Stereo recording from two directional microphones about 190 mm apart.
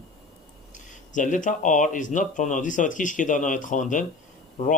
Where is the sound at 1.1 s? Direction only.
40° left (ahead or behind).